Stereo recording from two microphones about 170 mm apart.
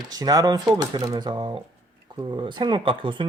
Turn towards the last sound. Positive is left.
turn(degrees=-30)  # may be behind; listen again after turning